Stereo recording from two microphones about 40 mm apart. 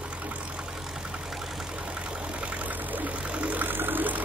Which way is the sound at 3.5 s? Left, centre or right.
Right.